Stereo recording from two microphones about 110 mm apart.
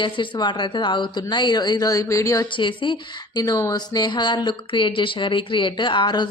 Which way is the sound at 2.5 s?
50° left (ahead or behind).